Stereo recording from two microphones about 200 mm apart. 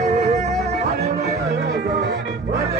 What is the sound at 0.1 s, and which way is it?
Music, 35° right (ahead or behind).